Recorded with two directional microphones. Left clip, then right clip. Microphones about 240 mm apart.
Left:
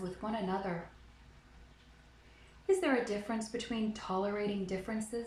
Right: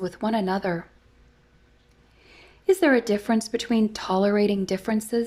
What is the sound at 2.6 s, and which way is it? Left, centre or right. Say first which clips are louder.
A woman's voice: right 11 dB; right.